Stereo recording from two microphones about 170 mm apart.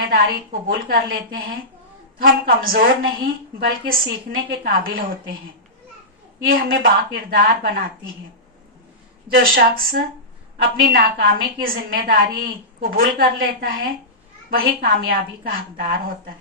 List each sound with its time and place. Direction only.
0.0 s a woman's voice: 60° right (ahead or behind)
6.5 s a woman's voice: 60° right (ahead or behind)
9.3 s a woman's voice: 60° right (ahead or behind)